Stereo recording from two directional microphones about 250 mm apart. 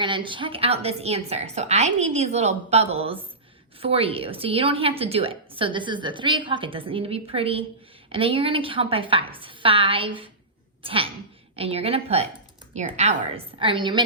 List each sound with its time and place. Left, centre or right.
0.0 s a woman's voice: centre